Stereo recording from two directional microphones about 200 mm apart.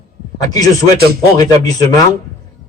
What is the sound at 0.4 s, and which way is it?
A man's voice, 20° left (ahead or behind).